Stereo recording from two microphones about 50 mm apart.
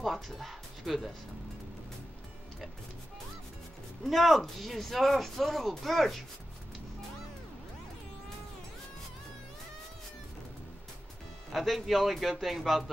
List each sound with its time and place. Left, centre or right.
0.0 s speech: centre
4.0 s speech: centre
11.5 s speech: centre